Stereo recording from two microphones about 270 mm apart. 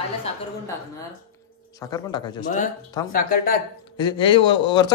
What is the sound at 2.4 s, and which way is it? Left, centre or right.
Speech, left.